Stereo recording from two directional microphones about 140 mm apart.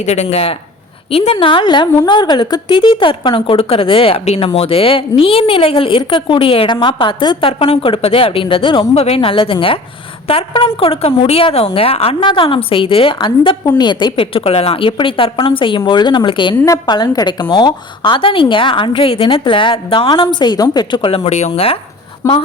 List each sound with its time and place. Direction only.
0.0 s speech: 55° left (ahead or behind); by 16.6 s 35° left (ahead or behind)
16.6 s speech: 20° left (ahead or behind)
21.2 s speech: 55° left (ahead or behind)
22.2 s speech: 25° left (ahead or behind)